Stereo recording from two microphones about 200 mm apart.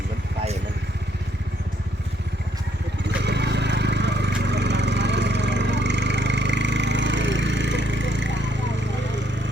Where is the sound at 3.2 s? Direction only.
60° right (ahead or behind).